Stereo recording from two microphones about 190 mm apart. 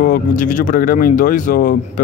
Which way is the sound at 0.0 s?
45° left (ahead or behind).